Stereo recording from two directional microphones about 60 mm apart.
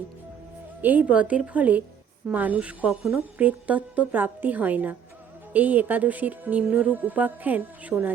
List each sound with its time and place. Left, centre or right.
0.8 s music: right